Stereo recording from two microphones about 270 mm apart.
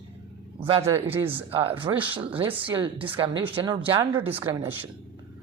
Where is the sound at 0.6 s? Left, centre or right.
Centre.